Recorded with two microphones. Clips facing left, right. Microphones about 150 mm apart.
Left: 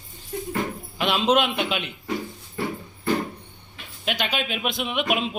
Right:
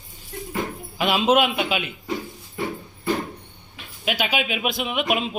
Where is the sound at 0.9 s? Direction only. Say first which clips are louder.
Right 2 dB; 5° right (ahead or behind).